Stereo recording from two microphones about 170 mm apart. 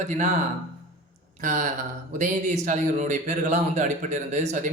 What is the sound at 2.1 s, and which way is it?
Speech, 50° right (ahead or behind).